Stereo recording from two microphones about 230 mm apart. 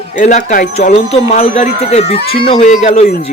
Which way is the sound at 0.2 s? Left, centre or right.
Left.